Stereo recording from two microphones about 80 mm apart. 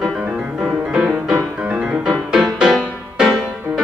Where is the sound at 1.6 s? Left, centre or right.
Centre.